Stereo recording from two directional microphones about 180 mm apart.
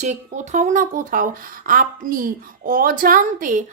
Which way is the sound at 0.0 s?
40° right (ahead or behind).